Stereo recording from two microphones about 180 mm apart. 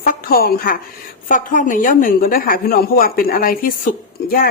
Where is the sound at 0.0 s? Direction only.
55° left (ahead or behind).